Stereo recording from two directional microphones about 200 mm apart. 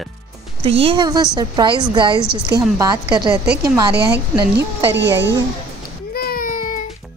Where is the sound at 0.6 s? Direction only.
30° right (ahead or behind).